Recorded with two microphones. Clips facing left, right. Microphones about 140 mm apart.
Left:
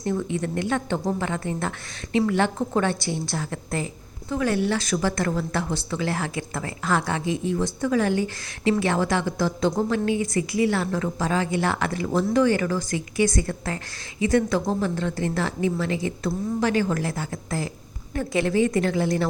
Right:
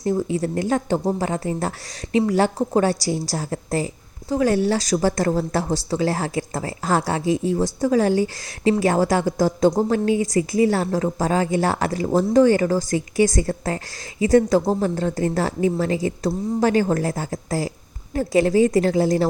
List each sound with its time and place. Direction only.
0.0 s a woman's voice: 35° right (ahead or behind)